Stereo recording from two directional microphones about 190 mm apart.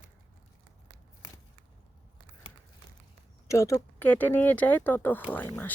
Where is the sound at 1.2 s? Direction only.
15° left (ahead or behind).